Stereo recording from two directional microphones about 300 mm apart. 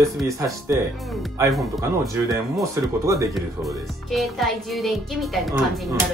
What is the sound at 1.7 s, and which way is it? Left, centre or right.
Speech, centre.